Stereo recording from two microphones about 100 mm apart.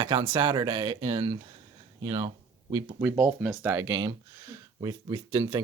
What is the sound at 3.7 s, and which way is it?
Speech, 40° right (ahead or behind).